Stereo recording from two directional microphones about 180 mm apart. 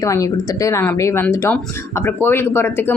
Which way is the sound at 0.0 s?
15° left (ahead or behind).